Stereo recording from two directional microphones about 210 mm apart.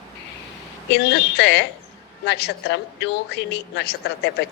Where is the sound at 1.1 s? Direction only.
55° left (ahead or behind).